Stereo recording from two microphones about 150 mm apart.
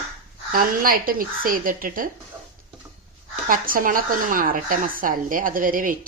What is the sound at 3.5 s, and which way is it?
A woman's voice, 70° right (ahead or behind).